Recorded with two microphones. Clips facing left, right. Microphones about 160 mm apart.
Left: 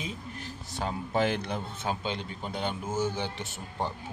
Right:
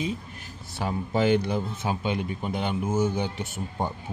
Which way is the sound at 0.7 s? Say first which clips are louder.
Right 3 dB; 5° right (ahead or behind).